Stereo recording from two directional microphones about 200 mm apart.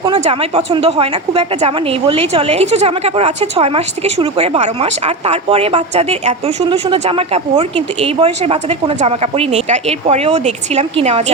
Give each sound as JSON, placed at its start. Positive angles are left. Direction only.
{"t": 0.0, "sound": "a woman's voice", "side_deg": -30}